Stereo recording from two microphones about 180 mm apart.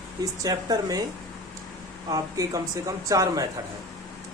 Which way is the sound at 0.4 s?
20° right (ahead or behind).